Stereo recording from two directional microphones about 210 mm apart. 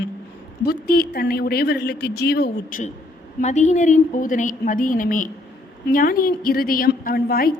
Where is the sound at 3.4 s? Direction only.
35° left (ahead or behind).